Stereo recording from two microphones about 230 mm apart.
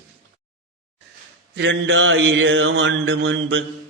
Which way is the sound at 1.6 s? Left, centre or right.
Right.